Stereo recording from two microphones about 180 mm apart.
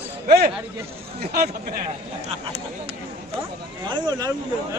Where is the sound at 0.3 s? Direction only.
60° right (ahead or behind).